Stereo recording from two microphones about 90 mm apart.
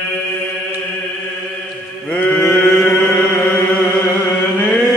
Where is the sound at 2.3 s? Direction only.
Centre (ahead or behind).